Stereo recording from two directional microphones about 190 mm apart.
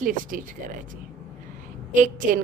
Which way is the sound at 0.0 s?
45° right (ahead or behind).